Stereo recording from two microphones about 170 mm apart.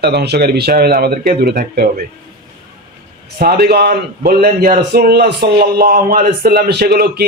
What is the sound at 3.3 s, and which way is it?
A man's voice, 65° right (ahead or behind).